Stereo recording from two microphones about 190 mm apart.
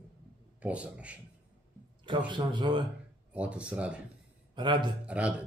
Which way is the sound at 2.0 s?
25° right (ahead or behind).